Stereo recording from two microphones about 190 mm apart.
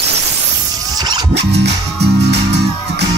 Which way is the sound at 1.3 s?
60° right (ahead or behind).